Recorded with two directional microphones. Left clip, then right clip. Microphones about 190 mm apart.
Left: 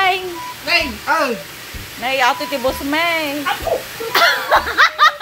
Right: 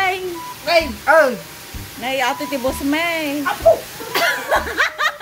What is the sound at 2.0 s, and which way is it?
A woman's voice, 15° right (ahead or behind).